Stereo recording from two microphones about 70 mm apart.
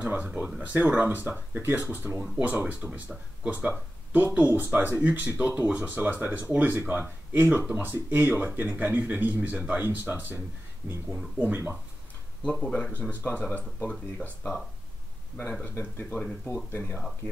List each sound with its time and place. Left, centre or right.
0.0 s a sound: right
0.6 s speech: right
12.4 s speech: centre
15.6 s speech: left